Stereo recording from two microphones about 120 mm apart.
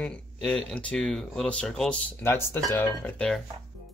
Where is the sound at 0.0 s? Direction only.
5° left (ahead or behind).